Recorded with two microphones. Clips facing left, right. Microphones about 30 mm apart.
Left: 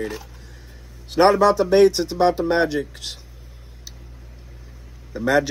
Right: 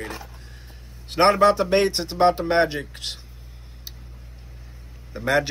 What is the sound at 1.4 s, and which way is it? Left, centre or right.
Speech, right.